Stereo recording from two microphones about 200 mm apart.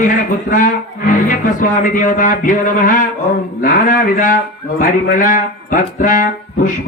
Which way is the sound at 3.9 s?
40° left (ahead or behind).